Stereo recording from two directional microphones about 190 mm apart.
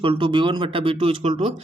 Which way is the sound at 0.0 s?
25° right (ahead or behind).